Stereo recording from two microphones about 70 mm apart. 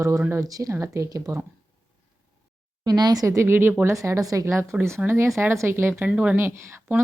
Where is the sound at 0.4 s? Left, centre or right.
Right.